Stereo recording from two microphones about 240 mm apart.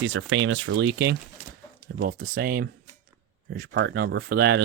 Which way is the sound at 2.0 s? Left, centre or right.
Right.